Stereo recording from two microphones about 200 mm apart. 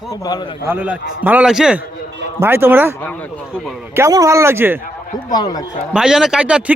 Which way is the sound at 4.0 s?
15° right (ahead or behind).